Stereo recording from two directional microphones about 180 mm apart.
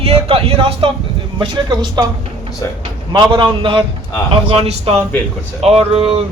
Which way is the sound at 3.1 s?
25° right (ahead or behind).